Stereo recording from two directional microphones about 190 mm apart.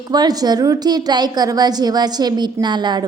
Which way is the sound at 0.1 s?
20° right (ahead or behind).